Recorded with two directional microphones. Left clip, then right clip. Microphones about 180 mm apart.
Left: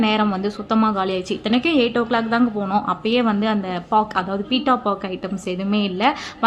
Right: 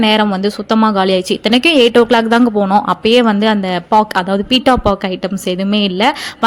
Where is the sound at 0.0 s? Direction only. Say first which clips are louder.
Right 7 dB; 30° right (ahead or behind).